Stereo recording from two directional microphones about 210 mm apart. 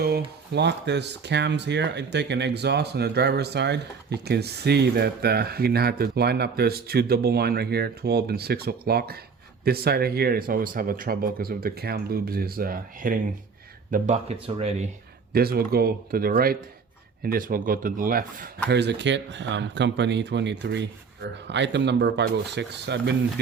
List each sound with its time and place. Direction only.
0.5 s speech: 55° right (ahead or behind)
13.9 s speech: 30° right (ahead or behind)
15.3 s speech: 45° right (ahead or behind)
18.7 s speech: 55° right (ahead or behind)